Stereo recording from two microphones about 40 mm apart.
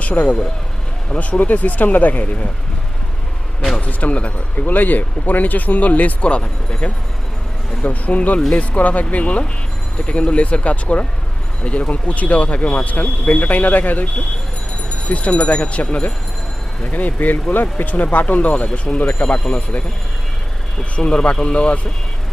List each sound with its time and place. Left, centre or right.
0.0 s speech: left
3.8 s speech: left
4.6 s speech: left
7.9 s speech: left
8.4 s speech: left
18.6 s speech: left
18.9 s speech: left
21.0 s speech: centre
21.4 s speech: left